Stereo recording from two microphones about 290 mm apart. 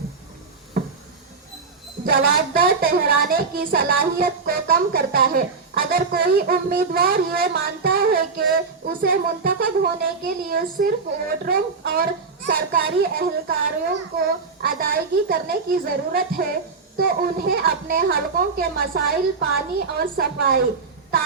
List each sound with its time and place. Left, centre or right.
2.0 s a woman's voice: right